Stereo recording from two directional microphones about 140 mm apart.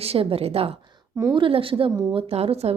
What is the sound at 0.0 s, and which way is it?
Speech, 45° right (ahead or behind).